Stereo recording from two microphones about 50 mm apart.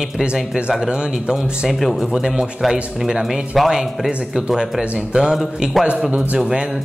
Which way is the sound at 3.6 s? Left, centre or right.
Centre.